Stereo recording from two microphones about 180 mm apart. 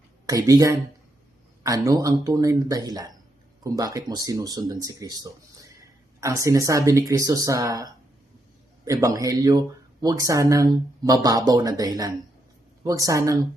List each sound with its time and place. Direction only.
0.3 s speech: 20° right (ahead or behind)